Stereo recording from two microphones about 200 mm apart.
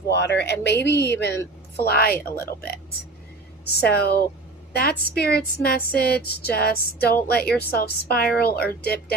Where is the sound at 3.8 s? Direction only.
50° left (ahead or behind).